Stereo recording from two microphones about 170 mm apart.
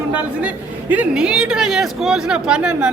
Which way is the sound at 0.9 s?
5° right (ahead or behind).